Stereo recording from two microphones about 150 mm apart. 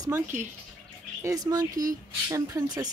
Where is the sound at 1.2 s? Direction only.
25° right (ahead or behind).